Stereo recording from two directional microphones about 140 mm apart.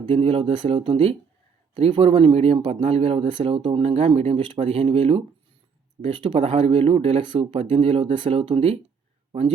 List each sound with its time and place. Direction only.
0.1 s speech: 45° right (ahead or behind)